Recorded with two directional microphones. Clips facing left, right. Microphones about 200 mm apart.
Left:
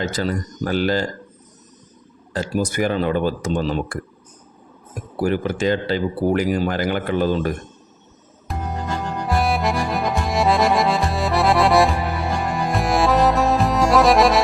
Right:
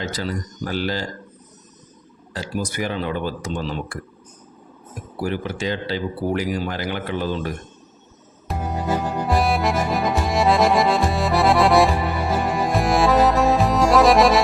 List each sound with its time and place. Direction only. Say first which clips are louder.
0.0 s speech: left 4 dB; 50° left (ahead or behind)
2.3 s speech: left 5 dB; 50° left (ahead or behind)
5.2 s speech: left 5 dB; 50° left (ahead or behind)
8.4 s music: right 1 dB; centre (ahead or behind)
9.2 s accordion: left 1 dB; centre (ahead or behind)